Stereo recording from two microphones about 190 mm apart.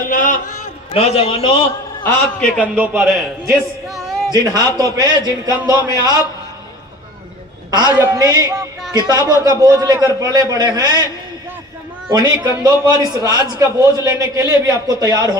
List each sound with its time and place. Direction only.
0.1 s a sound: 45° left (ahead or behind)
0.9 s a man's voice: 30° left (ahead or behind)
2.0 s a man's voice: 5° left (ahead or behind)
2.6 s a man's voice: 5° right (ahead or behind)
4.3 s a man's voice: 20° right (ahead or behind)
7.7 s a man's voice: 20° right (ahead or behind)
12.4 s a man's voice: 15° right (ahead or behind)